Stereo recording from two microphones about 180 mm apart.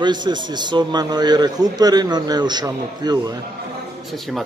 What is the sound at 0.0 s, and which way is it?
A man's voice, 25° right (ahead or behind).